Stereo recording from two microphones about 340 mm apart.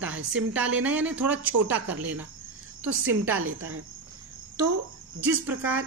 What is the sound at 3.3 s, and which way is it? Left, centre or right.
Speech, right.